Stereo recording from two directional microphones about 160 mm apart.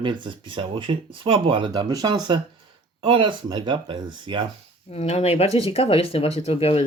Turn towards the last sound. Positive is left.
turn(degrees=35)  # may be behind; listen again after turning